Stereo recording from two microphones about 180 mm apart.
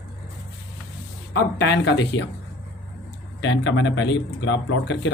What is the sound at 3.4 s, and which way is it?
Speech, 90° left.